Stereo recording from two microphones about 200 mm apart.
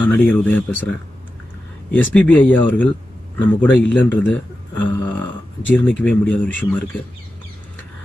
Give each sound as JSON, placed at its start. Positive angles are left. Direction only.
{"t": 0.0, "sound": "speech", "side_deg": 10}
{"t": 2.1, "sound": "speech", "side_deg": 10}
{"t": 4.9, "sound": "burping", "side_deg": 10}
{"t": 5.7, "sound": "speech", "side_deg": 5}